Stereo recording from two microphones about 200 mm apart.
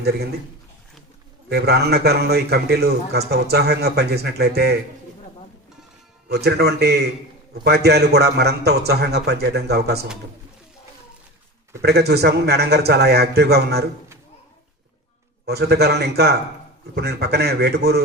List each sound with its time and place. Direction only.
0.0 s speech: 55° right (ahead or behind)
1.5 s a man's voice: 55° right (ahead or behind)
6.2 s a man's voice: 55° right (ahead or behind)
11.8 s a man's voice: 55° right (ahead or behind)
15.4 s a man's voice: 55° right (ahead or behind)